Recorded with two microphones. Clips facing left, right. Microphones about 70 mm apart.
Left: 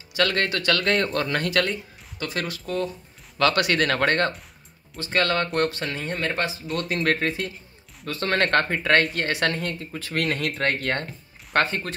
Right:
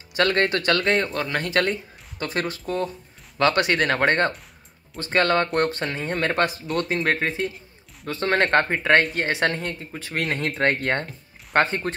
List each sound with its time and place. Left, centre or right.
0.1 s speech: right
0.8 s speech: centre
1.5 s speech: right
4.9 s speech: right
6.1 s speech: right
7.0 s speech: centre
10.6 s speech: right